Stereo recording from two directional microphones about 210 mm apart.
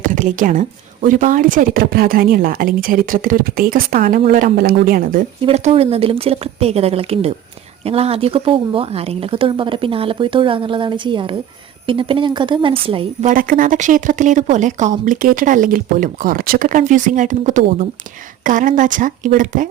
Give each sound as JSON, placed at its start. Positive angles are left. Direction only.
{"t": 0.0, "sound": "a woman's voice", "side_deg": -40}
{"t": 5.5, "sound": "speech", "side_deg": -30}
{"t": 13.3, "sound": "speech", "side_deg": -40}